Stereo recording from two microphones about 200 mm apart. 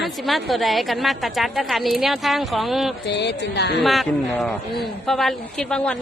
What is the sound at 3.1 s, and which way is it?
Speech, 60° left (ahead or behind).